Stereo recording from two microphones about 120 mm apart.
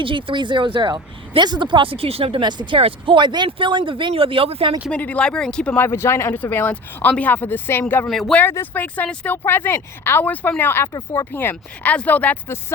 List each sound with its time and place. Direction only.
0.0 s speech: 45° right (ahead or behind)
4.9 s speech: 10° left (ahead or behind)
8.0 s speech: 5° left (ahead or behind)
8.4 s speech: 15° left (ahead or behind)